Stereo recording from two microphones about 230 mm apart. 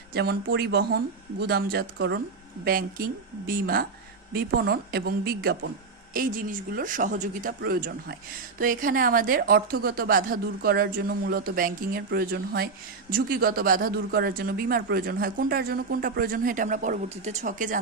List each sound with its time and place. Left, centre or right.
0.1 s speech: right